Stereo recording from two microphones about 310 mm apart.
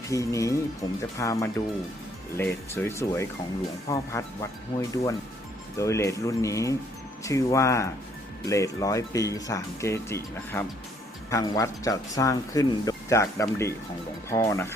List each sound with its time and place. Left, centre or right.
0.1 s speech: centre